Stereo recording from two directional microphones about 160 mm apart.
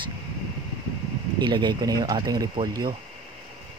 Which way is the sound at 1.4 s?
30° right (ahead or behind).